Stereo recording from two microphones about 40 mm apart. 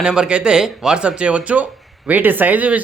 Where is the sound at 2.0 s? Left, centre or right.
Right.